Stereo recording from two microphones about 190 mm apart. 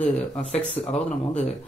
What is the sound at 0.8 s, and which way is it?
Speech, 35° left (ahead or behind).